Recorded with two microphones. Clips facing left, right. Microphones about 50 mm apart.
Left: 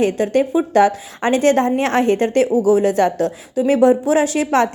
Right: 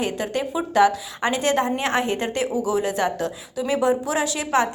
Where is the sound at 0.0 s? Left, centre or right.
Left.